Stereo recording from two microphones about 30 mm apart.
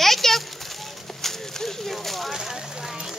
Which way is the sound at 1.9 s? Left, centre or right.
Centre.